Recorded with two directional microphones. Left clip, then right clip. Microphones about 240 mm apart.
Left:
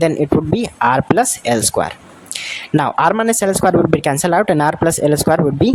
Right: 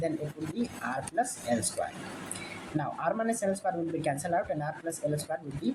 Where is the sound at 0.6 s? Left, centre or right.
Left.